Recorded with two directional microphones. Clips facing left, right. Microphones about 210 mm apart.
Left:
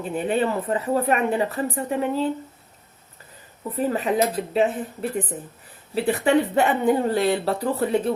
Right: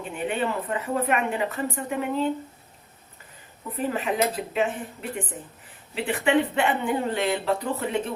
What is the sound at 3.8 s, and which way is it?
Speech, 35° left (ahead or behind).